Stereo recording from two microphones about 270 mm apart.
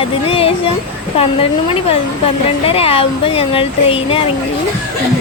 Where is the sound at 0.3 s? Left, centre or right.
Left.